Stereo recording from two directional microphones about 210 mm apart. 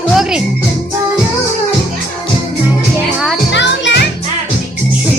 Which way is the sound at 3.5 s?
55° left (ahead or behind).